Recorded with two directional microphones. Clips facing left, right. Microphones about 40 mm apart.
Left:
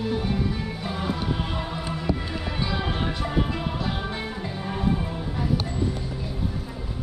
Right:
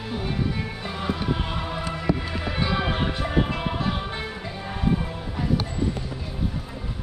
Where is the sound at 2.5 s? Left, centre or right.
Right.